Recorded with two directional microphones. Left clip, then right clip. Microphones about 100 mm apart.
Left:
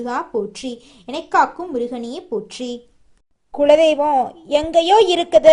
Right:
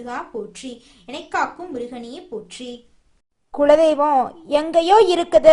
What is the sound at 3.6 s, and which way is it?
A woman's voice, centre (ahead or behind).